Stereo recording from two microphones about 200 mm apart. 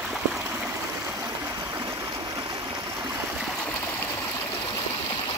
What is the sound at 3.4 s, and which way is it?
Stream, 5° left (ahead or behind).